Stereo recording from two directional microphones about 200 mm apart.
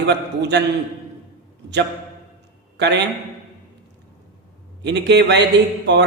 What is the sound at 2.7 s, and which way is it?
Speech, 60° right (ahead or behind).